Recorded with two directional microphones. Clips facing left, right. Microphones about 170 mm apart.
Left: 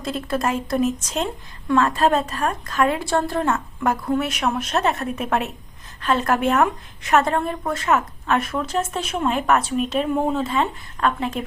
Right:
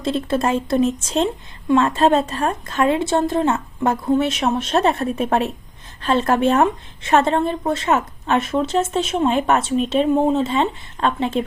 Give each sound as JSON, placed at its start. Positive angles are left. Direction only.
{"t": 0.0, "sound": "speech", "side_deg": -25}